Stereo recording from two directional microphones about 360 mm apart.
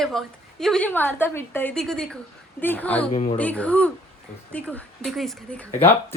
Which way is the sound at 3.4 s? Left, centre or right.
Centre.